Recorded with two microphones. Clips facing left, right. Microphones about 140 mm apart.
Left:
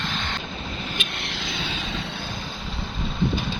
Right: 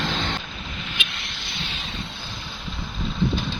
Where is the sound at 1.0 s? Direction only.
55° left (ahead or behind).